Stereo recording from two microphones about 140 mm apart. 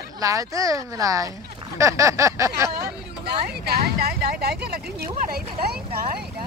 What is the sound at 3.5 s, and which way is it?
Speech, 90° right.